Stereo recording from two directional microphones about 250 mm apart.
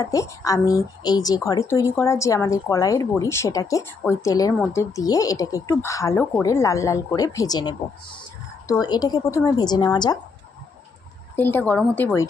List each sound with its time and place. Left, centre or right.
0.0 s speech: centre
11.3 s speech: centre